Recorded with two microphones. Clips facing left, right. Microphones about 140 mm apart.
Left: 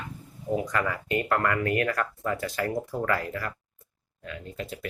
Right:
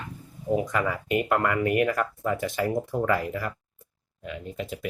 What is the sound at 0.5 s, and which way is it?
Speech, 5° right (ahead or behind).